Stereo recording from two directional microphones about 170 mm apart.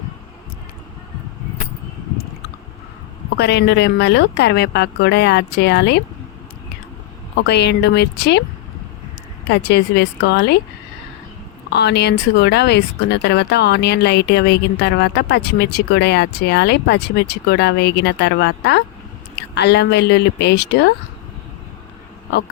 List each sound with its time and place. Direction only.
3.3 s speech: 80° left
7.4 s speech: 80° left
9.5 s speech: 80° left
11.7 s speech: 80° left